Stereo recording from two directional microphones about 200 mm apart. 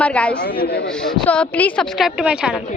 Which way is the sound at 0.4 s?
50° left (ahead or behind).